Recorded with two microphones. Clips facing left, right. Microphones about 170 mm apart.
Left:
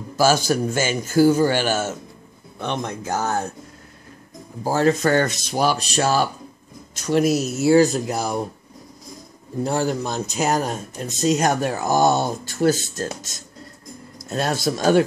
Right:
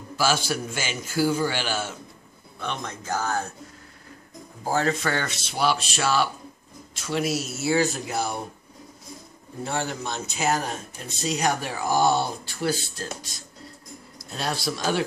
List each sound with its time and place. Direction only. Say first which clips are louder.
0.1 s speech: left 7 dB; 40° left (ahead or behind)
2.8 s speech: left 2 dB; 20° left (ahead or behind)
4.6 s speech: left 6 dB; 40° left (ahead or behind)
9.6 s speech: left 7 dB; 40° left (ahead or behind)